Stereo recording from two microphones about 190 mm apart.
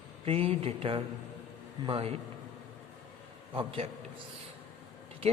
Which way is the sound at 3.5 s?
30° right (ahead or behind).